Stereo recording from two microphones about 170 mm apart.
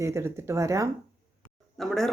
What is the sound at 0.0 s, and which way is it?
Speech, 15° right (ahead or behind).